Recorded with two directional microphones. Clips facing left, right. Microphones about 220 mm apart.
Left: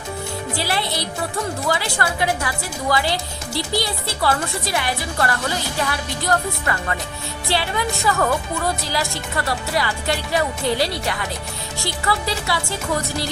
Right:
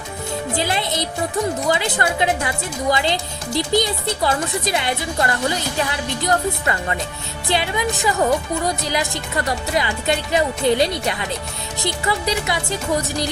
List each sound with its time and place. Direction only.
0.6 s a woman's voice: 20° right (ahead or behind)